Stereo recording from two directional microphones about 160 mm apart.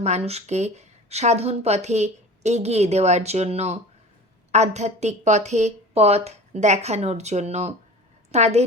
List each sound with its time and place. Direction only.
0.0 s speech: 40° right (ahead or behind)